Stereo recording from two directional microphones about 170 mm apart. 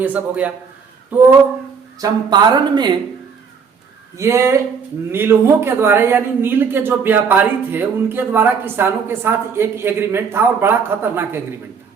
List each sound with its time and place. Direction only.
0.0 s a man's voice: 10° right (ahead or behind)
2.0 s speech: 25° right (ahead or behind)
4.2 s a man's voice: 15° right (ahead or behind)